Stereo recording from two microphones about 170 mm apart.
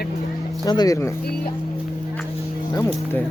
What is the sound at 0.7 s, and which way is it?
Speech, 20° left (ahead or behind).